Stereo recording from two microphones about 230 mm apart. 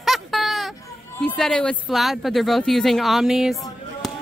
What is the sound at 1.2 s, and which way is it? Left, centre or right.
Speech, centre.